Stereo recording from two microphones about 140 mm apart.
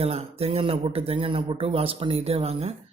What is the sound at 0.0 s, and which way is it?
Speech, 45° right (ahead or behind).